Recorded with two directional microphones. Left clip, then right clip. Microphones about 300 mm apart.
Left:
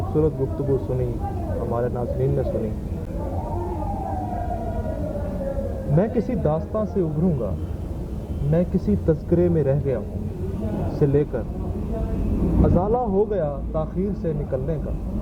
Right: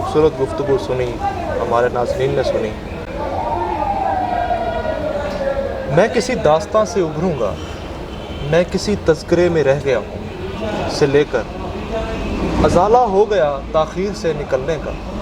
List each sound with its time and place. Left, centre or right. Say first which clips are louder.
0.2 s speech: right 7 dB; centre
3.2 s train: right 12 dB; centre
8.4 s speech: right 8 dB; centre
11.9 s vehicle: right 8 dB; centre
13.3 s speech: right 10 dB; centre